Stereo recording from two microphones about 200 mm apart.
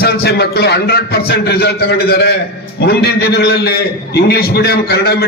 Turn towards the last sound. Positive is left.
turn(degrees=50)  # may be behind; listen again after turning